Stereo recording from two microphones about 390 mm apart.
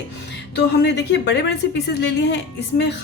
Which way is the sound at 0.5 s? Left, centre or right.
Left.